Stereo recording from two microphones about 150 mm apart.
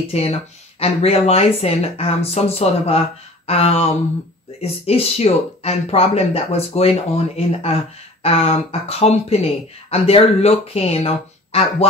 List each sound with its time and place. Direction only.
0.1 s speech: 40° left (ahead or behind)